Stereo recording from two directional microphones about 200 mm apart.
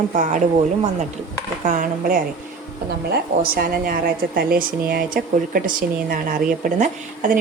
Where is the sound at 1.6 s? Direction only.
40° right (ahead or behind).